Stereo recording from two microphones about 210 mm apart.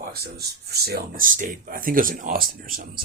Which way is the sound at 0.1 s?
50° right (ahead or behind).